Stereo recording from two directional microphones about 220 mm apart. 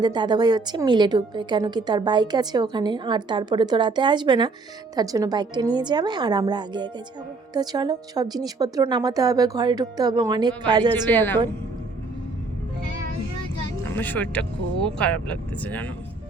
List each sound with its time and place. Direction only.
0.0 s a woman's voice: 20° right (ahead or behind)
10.9 s speech: 10° left (ahead or behind)
13.9 s speech: 10° left (ahead or behind)